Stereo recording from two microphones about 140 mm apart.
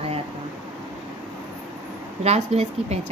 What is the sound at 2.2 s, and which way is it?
Speech, 50° right (ahead or behind).